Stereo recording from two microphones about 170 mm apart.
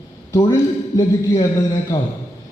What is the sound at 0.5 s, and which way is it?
Speech, 20° left (ahead or behind).